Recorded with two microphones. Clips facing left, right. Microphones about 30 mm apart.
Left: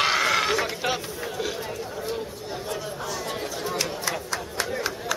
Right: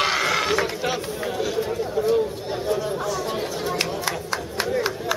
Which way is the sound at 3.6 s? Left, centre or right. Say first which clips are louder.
Right 2 dB; right.